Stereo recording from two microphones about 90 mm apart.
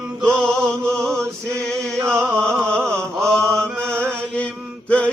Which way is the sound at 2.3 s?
10° left (ahead or behind).